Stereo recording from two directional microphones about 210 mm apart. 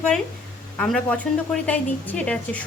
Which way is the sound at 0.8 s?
5° left (ahead or behind).